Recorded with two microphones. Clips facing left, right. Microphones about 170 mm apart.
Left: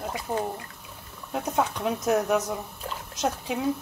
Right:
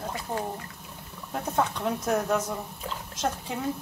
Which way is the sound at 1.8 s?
15° left (ahead or behind).